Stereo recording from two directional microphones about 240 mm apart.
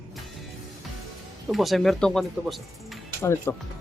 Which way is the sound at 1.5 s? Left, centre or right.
Centre.